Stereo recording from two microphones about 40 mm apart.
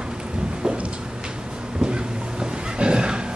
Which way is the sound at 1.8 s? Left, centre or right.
Right.